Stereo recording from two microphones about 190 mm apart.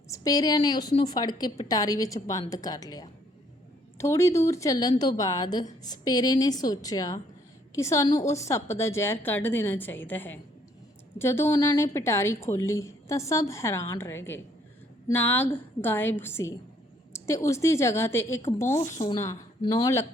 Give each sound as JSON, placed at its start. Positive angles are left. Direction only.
{"t": 0.1, "sound": "a woman's voice", "side_deg": 20}